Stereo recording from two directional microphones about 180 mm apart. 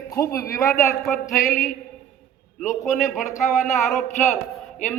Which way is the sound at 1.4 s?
45° left (ahead or behind).